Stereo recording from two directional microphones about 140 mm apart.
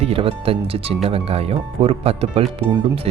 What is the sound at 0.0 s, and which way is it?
Speech, 45° right (ahead or behind).